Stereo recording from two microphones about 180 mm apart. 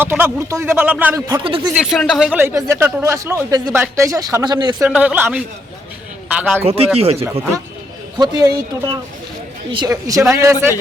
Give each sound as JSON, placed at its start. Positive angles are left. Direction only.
{"t": 0.0, "sound": "speech", "side_deg": -10}
{"t": 1.5, "sound": "speech", "side_deg": -30}
{"t": 1.7, "sound": "speech", "side_deg": -5}
{"t": 4.9, "sound": "a man's voice", "side_deg": -5}
{"t": 6.7, "sound": "speech", "side_deg": -35}
{"t": 8.2, "sound": "speech", "side_deg": -20}